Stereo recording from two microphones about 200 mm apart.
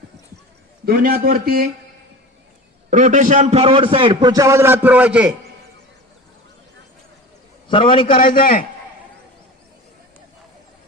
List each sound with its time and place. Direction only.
0.9 s a man's voice: 50° right (ahead or behind)
2.9 s a man's voice: 40° right (ahead or behind); by 5.3 s 5° right (ahead or behind)
7.7 s a man's voice: 25° left (ahead or behind)
8.2 s a man's voice: 45° left (ahead or behind)